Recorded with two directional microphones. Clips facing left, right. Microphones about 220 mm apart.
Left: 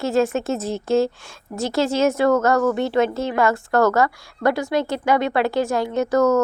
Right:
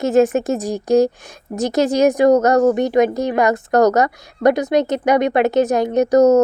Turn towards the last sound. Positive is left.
turn(degrees=-20)  # may be behind; listen again after turning